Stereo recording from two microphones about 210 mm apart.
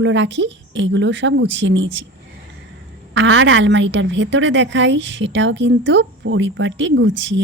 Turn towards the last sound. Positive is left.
turn(degrees=-60)  # may be behind; listen again after turning